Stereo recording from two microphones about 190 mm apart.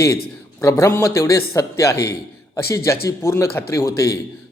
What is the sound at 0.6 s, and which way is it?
Speech, 15° left (ahead or behind).